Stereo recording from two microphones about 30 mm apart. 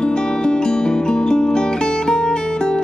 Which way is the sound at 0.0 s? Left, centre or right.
Left.